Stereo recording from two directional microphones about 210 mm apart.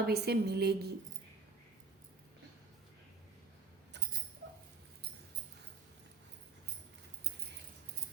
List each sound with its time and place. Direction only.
0.0 s a woman's voice: 50° right (ahead or behind)